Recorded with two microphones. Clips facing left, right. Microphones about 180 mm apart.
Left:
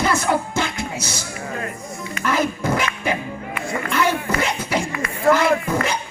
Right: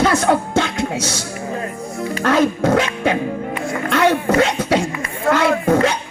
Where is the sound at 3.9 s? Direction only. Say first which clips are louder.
Right 6 dB; 70° right (ahead or behind).